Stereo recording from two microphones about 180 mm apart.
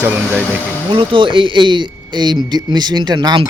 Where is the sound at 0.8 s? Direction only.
30° right (ahead or behind).